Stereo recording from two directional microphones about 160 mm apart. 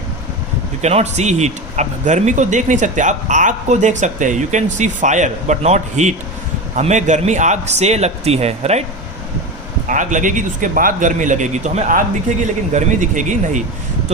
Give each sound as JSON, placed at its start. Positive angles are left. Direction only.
{"t": 0.8, "sound": "speech", "side_deg": -45}
{"t": 9.9, "sound": "speech", "side_deg": -55}